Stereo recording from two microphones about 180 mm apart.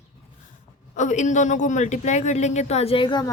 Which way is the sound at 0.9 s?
40° left (ahead or behind).